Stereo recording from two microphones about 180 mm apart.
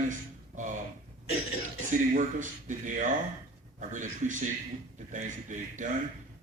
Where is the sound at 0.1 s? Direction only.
45° right (ahead or behind).